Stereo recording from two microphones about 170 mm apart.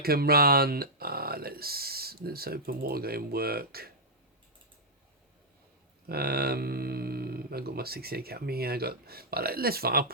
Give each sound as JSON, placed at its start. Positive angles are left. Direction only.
{"t": 0.0, "sound": "speech", "side_deg": -65}
{"t": 6.1, "sound": "speech", "side_deg": -65}